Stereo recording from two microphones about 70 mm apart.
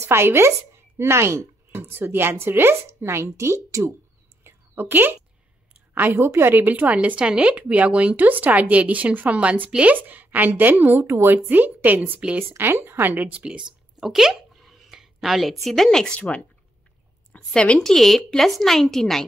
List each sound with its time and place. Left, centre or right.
0.0 s a woman's voice: right
4.4 s a sound: right
5.9 s speech: right
11.1 s a woman's voice: right
11.3 s speech: right
13.9 s speech: centre
14.6 s a sound: centre
15.6 s speech: centre
16.2 s a woman's voice: centre
17.9 s speech: centre